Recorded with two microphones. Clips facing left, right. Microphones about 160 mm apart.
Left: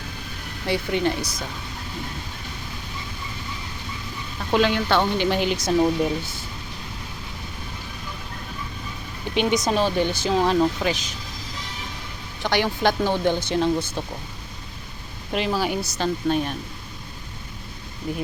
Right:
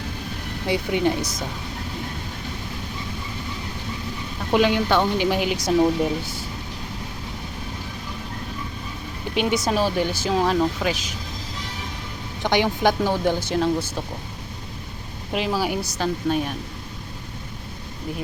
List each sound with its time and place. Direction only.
0.7 s speech: 15° right (ahead or behind)
4.5 s speech: 15° right (ahead or behind)
9.3 s speech: 5° right (ahead or behind)
12.4 s speech: 20° right (ahead or behind)
15.3 s speech: 5° right (ahead or behind)